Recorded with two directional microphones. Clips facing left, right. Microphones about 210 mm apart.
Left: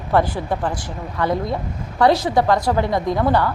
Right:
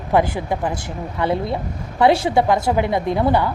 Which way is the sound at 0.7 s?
25° right (ahead or behind).